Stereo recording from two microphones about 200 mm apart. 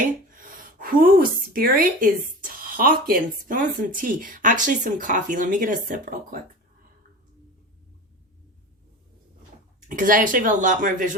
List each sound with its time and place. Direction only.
0.3 s a woman's voice: 45° right (ahead or behind)
9.9 s speech: 40° right (ahead or behind)